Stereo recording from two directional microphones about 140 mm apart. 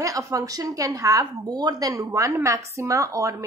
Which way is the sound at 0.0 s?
25° right (ahead or behind).